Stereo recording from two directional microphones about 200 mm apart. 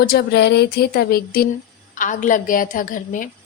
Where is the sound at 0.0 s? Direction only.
55° left (ahead or behind).